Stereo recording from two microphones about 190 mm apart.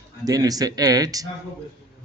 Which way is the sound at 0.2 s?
20° right (ahead or behind).